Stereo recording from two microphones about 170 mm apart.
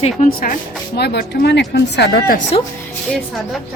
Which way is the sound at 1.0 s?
75° left (ahead or behind).